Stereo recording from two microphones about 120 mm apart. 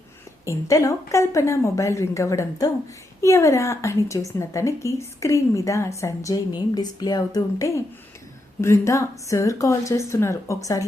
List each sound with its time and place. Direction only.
0.4 s a woman's voice: 25° left (ahead or behind)